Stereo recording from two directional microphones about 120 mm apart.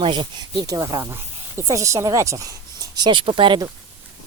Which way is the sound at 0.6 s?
30° right (ahead or behind).